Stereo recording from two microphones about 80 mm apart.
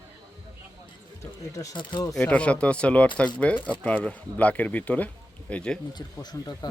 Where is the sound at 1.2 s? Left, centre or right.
Left.